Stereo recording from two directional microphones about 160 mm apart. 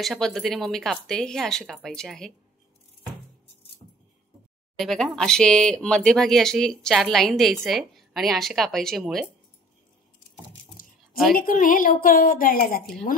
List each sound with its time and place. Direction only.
0.0 s speech: centre (ahead or behind)
4.7 s speech: centre (ahead or behind)
11.0 s a sound: centre (ahead or behind)
11.3 s a woman's voice: 60° left (ahead or behind)